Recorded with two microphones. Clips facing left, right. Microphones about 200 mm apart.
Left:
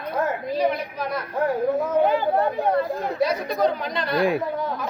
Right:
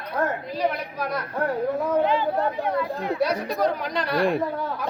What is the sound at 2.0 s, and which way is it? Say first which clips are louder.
Speech: left 2 dB; 50° left (ahead or behind).